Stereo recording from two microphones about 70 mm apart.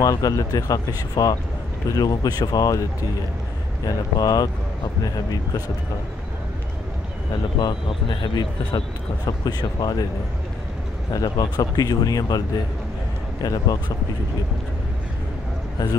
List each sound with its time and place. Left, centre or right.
0.0 s speech: left
3.8 s speech: left
7.5 s speech: left
9.2 s speech: left
11.2 s speech: left
15.8 s speech: left